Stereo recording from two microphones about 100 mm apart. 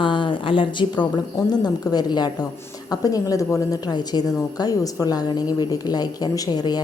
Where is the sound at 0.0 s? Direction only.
55° left (ahead or behind).